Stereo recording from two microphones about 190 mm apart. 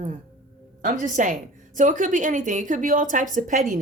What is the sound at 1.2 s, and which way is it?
Speech, 40° right (ahead or behind).